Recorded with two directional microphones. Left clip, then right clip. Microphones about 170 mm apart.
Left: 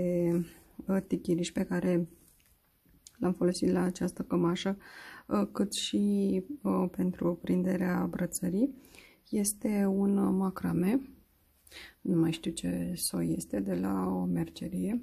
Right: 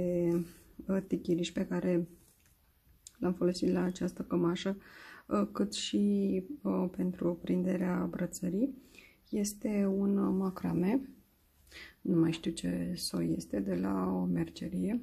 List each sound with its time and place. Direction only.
0.0 s a sound: 30° left (ahead or behind)
0.8 s speech: 25° left (ahead or behind)
3.2 s speech: 25° left (ahead or behind)